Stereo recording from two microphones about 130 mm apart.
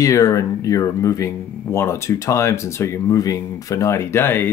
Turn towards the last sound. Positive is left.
turn(degrees=15)  # may be behind; listen again after turning